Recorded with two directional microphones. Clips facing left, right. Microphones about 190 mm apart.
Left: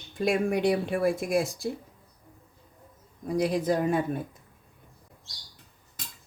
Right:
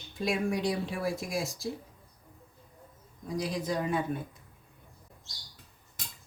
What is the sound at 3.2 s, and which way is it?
Speech, 60° left (ahead or behind).